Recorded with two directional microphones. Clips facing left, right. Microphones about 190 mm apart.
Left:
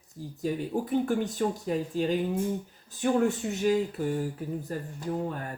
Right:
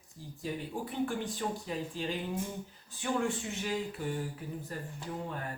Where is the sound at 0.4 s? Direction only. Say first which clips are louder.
Left 8 dB; 40° left (ahead or behind).